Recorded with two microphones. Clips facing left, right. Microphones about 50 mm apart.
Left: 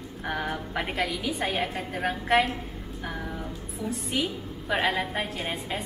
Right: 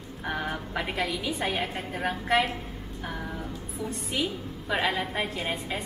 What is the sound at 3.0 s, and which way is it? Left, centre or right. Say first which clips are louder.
Music: left 1 dB; centre.